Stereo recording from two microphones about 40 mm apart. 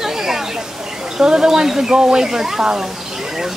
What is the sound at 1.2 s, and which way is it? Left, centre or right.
Speech, centre.